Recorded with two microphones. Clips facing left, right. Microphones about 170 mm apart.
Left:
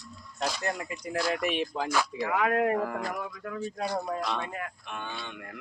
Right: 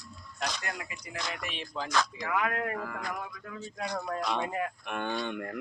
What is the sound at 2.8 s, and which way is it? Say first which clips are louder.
Speech: left 5 dB; 50° left (ahead or behind).